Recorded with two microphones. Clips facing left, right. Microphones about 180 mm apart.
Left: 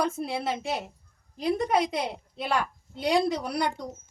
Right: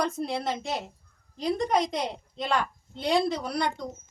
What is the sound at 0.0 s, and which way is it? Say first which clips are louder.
A woman's voice: even; 5° left (ahead or behind).